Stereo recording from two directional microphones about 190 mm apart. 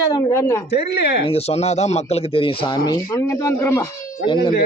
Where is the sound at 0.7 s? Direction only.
60° left (ahead or behind).